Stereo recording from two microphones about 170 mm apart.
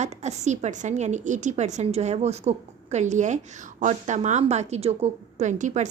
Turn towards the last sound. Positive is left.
turn(degrees=-45)  # may be behind; listen again after turning